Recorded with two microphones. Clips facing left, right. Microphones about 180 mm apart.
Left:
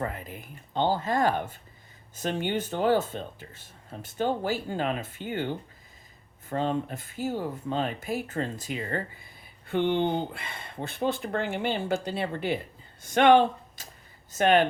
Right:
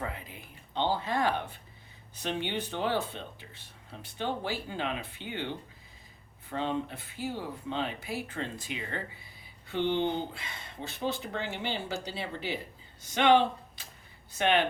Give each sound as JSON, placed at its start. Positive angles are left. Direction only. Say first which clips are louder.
{"t": 0.0, "sound": "speech", "louder": "left 5 dB", "side_deg": 45}
{"t": 6.5, "sound": "speech", "louder": "left 4 dB", "side_deg": 45}